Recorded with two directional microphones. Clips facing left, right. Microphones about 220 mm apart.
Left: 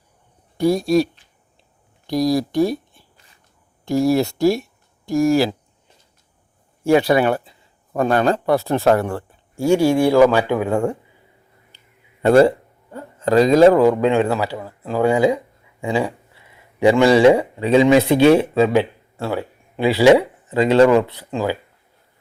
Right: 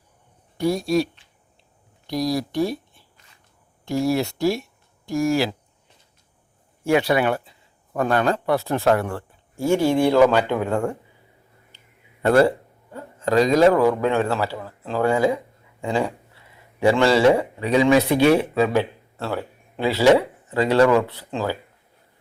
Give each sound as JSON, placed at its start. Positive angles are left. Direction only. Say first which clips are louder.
{"t": 0.6, "sound": "speech", "louder": "left 4 dB", "side_deg": 35}
{"t": 3.8, "sound": "speech", "louder": "left 5 dB", "side_deg": 40}
{"t": 6.8, "sound": "speech", "louder": "left 4 dB", "side_deg": 35}
{"t": 9.6, "sound": "speech", "louder": "left 3 dB", "side_deg": 10}
{"t": 12.2, "sound": "speech", "louder": "left 4 dB", "side_deg": 25}
{"t": 13.8, "sound": "speech", "louder": "left 4 dB", "side_deg": 20}
{"t": 18.7, "sound": "speech", "louder": "left 4 dB", "side_deg": 15}